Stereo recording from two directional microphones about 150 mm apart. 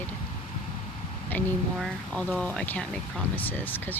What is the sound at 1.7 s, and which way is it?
Speech, centre (ahead or behind).